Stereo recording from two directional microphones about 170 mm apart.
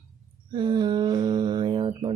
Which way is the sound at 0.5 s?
25° right (ahead or behind).